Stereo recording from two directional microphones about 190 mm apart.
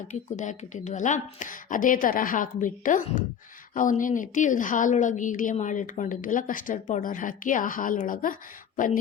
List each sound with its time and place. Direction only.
0.1 s a woman's voice: 40° left (ahead or behind)